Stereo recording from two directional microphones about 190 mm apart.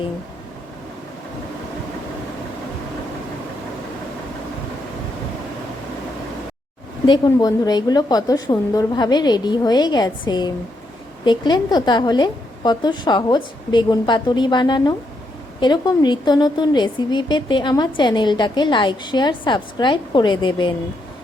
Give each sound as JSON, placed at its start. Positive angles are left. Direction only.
{"t": 7.0, "sound": "a woman's voice", "side_deg": 20}